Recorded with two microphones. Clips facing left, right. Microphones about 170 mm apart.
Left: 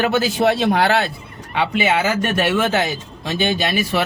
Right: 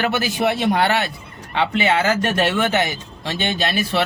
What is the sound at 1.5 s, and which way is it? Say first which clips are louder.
Speech: even; 10° left (ahead or behind).